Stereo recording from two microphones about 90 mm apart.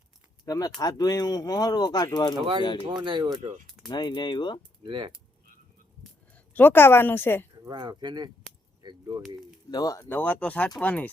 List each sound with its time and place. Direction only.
0.4 s speech: 40° left (ahead or behind)
2.9 s speech: 55° right (ahead or behind)
3.8 s speech: 55° left (ahead or behind)
4.8 s speech: 65° right (ahead or behind)
6.3 s speech: 20° left (ahead or behind)
7.7 s speech: 55° right (ahead or behind)
8.8 s a sound: 50° right (ahead or behind)
9.6 s speech: 45° left (ahead or behind)
10.0 s speech: 20° left (ahead or behind)